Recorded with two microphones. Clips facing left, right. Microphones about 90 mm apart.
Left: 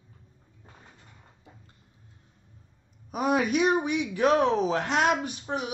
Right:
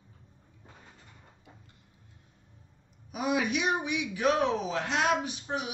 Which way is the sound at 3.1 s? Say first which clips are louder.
Left 4 dB; 45° left (ahead or behind).